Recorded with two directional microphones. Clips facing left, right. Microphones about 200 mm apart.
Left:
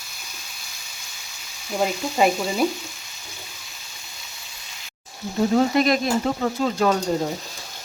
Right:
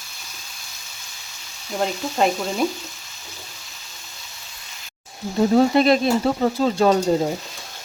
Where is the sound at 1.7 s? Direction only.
5° left (ahead or behind).